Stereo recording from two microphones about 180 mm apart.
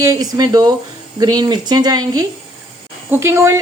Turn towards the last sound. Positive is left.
turn(degrees=-15)  # may be behind; listen again after turning